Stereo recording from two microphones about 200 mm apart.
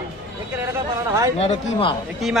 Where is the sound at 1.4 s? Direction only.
30° left (ahead or behind).